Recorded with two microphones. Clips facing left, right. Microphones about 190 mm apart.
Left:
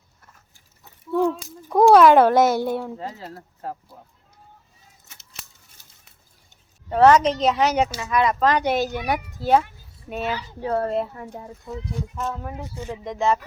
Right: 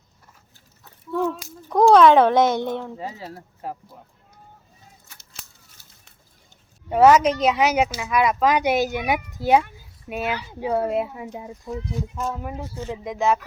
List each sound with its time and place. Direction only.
1.3 s speech: centre (ahead or behind)
3.0 s speech: 10° right (ahead or behind)
6.9 s speech: 10° right (ahead or behind)
12.6 s speech: 15° left (ahead or behind)
12.9 s speech: 5° right (ahead or behind)